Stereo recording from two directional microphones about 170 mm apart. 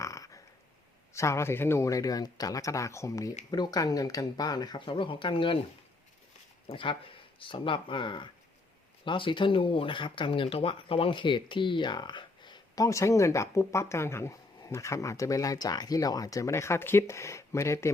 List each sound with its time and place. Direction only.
0.0 s a sound: 20° left (ahead or behind)
1.1 s speech: 15° left (ahead or behind)
6.7 s speech: 30° left (ahead or behind)